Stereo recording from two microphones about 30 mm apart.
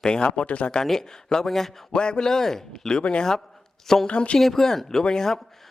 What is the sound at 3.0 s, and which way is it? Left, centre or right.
Speech, left.